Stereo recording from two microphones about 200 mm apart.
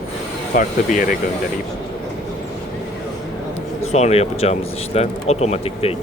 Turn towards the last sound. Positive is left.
turn(degrees=30)  # may be behind; listen again after turning